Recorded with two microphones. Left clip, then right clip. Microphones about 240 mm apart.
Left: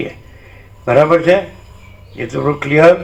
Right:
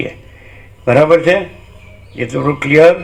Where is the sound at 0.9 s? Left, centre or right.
Right.